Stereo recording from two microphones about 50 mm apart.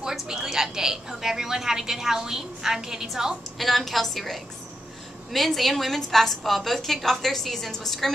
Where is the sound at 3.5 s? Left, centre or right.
Centre.